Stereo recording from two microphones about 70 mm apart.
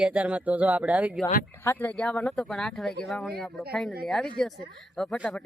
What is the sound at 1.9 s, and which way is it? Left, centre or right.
Speech, centre.